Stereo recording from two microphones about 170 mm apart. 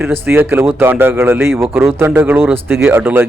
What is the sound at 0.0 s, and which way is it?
Speech, 15° right (ahead or behind).